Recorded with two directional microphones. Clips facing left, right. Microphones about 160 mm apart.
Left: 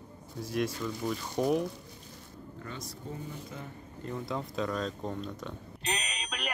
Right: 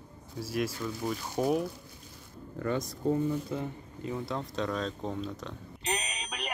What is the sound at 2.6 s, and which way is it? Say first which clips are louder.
Speech: right 13 dB; 75° right (ahead or behind).